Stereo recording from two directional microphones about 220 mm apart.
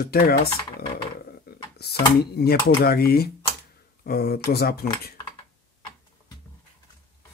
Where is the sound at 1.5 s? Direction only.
45° left (ahead or behind).